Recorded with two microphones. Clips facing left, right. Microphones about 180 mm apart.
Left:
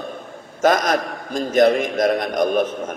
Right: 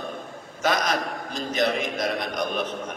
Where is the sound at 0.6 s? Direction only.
45° left (ahead or behind).